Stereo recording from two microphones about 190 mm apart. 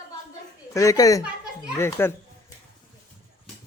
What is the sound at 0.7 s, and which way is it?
Speech, 15° left (ahead or behind).